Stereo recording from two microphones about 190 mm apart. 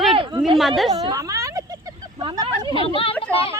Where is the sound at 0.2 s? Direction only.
25° right (ahead or behind).